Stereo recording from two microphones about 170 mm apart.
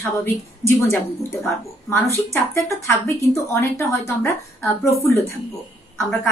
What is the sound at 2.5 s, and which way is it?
Speech, 15° left (ahead or behind).